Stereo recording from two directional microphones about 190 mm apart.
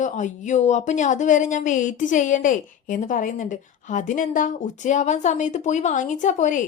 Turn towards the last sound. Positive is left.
turn(degrees=40)  # may be behind; listen again after turning